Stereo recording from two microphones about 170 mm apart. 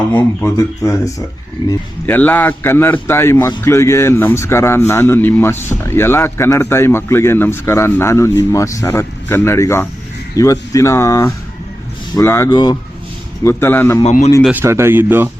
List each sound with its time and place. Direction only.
0.1 s a man's voice: 15° left (ahead or behind)
14.0 s a man's voice: 40° left (ahead or behind)
14.5 s speech: 15° right (ahead or behind)